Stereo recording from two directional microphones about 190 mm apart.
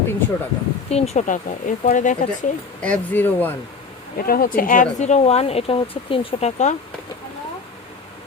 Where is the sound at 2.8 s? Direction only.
5° left (ahead or behind).